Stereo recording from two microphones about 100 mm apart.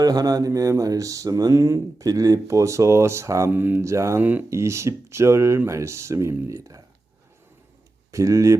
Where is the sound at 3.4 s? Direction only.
20° right (ahead or behind).